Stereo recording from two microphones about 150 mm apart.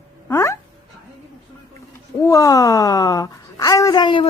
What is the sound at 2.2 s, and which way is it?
Speech, 20° left (ahead or behind).